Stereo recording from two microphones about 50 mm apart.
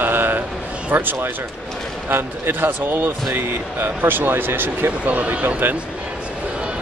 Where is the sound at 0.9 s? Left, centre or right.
Right.